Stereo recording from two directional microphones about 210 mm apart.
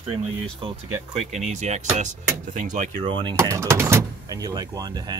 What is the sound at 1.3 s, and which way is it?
Speech, 35° right (ahead or behind).